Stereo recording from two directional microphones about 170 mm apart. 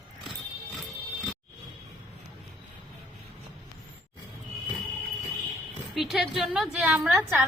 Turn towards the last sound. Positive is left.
turn(degrees=-10)  # may be behind; listen again after turning